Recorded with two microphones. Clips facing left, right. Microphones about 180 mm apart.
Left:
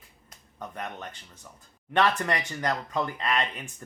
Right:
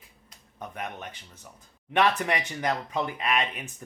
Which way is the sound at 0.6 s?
15° right (ahead or behind).